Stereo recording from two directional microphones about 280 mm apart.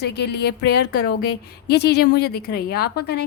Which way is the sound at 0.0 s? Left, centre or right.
Left.